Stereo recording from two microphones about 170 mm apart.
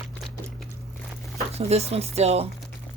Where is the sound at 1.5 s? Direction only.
40° right (ahead or behind).